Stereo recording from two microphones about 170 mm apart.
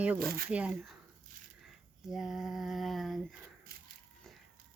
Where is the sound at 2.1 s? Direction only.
5° right (ahead or behind).